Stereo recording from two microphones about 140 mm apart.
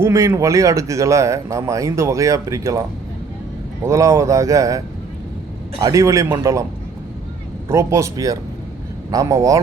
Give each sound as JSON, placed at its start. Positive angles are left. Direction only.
{"t": 0.0, "sound": "speech", "side_deg": -20}
{"t": 3.8, "sound": "speech", "side_deg": -20}
{"t": 5.8, "sound": "speech", "side_deg": -20}
{"t": 7.7, "sound": "speech", "side_deg": -20}